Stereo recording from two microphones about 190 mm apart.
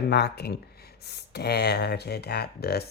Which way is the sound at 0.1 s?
60° left (ahead or behind).